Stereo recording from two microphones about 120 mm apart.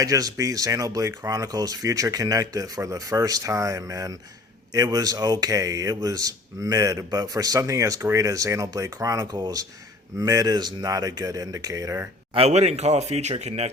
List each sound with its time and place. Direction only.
0.0 s speech: 30° right (ahead or behind)
12.3 s speech: 60° right (ahead or behind)